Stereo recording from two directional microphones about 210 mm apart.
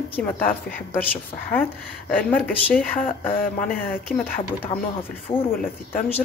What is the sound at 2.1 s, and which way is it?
A woman's voice, 5° left (ahead or behind).